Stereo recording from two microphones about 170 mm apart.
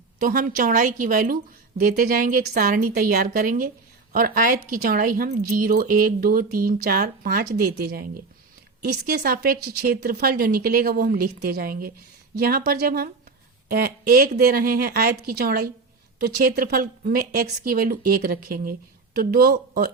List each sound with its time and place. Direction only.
0.2 s a woman's voice: 50° right (ahead or behind)